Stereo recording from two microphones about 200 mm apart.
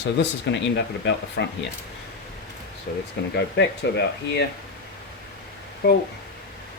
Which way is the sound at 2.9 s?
45° left (ahead or behind).